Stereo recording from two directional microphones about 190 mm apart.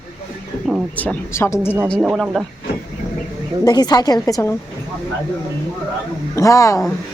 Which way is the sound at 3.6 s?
20° left (ahead or behind).